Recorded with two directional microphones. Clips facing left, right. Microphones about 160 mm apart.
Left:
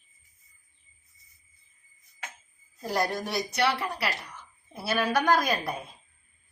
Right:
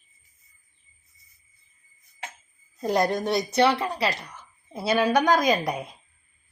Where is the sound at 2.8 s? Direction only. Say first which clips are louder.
Right 6 dB; 20° right (ahead or behind).